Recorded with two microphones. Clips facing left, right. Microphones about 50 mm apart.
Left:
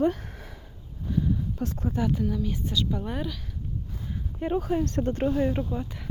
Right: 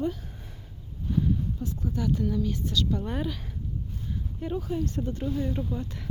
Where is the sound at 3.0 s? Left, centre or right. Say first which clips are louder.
Even; centre.